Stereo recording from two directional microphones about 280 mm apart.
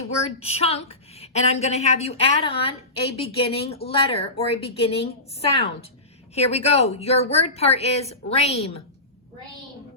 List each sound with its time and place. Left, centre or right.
0.3 s a woman's voice: left